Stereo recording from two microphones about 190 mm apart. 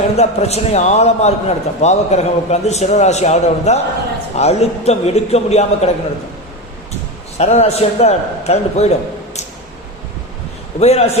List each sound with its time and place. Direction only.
0.2 s a man's voice: 35° left (ahead or behind)
7.3 s a man's voice: 35° left (ahead or behind)
10.8 s a man's voice: 35° left (ahead or behind)